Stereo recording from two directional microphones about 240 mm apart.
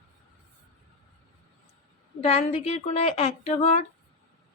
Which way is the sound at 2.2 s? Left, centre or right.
Left.